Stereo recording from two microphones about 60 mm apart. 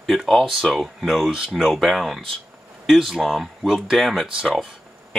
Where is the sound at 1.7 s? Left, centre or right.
Centre.